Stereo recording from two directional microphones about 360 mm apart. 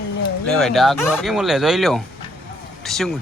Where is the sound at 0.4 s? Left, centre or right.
Centre.